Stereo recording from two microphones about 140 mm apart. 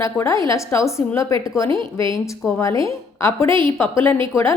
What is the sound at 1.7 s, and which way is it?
Speech, 35° right (ahead or behind).